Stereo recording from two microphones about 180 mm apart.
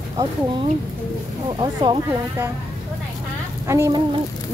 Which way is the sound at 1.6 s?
25° right (ahead or behind).